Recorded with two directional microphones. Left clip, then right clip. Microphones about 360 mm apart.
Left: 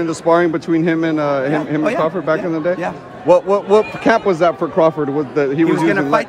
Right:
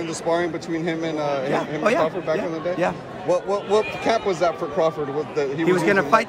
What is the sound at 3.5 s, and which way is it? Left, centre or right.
Speech, left.